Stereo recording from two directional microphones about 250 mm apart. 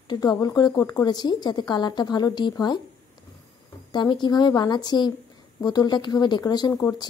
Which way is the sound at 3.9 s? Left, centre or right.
Centre.